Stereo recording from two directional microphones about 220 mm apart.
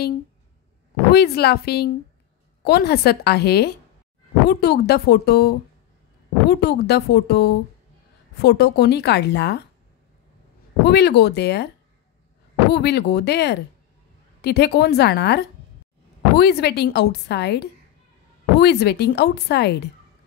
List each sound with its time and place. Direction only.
1.1 s a woman's voice: 45° left (ahead or behind)
10.8 s a woman's voice: 50° left (ahead or behind)
12.7 s a woman's voice: 50° left (ahead or behind)